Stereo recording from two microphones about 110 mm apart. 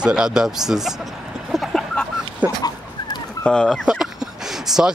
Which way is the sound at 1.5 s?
Centre (ahead or behind).